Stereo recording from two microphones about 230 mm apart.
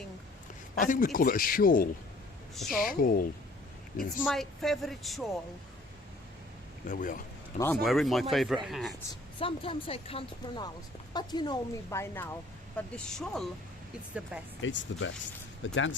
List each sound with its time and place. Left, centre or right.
0.8 s speech: left
3.9 s speech: centre
6.8 s speech: left
7.6 s speech: centre
9.4 s speech: left; by 13.5 s centre
14.6 s speech: left